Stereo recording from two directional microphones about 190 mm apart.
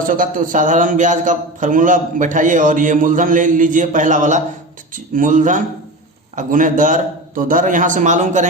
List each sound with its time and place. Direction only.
0.1 s a man's voice: 45° right (ahead or behind)